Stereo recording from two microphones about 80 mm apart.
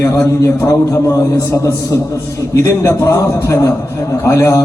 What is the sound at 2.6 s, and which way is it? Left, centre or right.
A man's voice, left.